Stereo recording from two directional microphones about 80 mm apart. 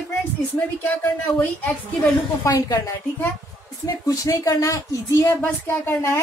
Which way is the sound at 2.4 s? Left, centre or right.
Left.